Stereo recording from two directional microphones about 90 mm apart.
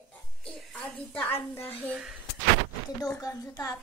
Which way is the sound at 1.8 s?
20° right (ahead or behind).